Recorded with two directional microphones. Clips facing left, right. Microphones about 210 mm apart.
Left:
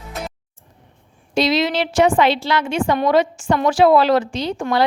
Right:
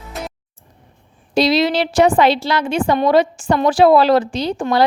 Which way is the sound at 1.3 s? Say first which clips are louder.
Right 3 dB; 35° right (ahead or behind).